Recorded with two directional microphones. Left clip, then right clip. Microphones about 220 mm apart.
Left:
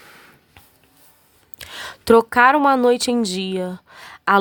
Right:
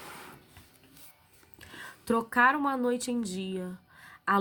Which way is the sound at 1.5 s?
50° left (ahead or behind).